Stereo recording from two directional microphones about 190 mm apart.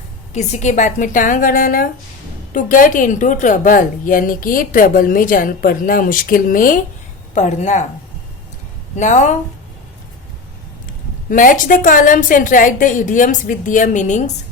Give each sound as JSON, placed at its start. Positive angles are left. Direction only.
{"t": 0.3, "sound": "a woman's voice", "side_deg": 40}
{"t": 9.0, "sound": "speech", "side_deg": 40}
{"t": 11.3, "sound": "a woman's voice", "side_deg": 45}